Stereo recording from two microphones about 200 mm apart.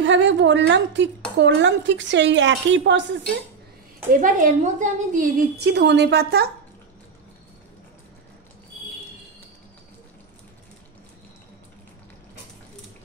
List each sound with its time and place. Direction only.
0.0 s a woman's voice: 65° right (ahead or behind)
4.1 s a woman's voice: 40° right (ahead or behind)
5.7 s a woman's voice: 60° right (ahead or behind)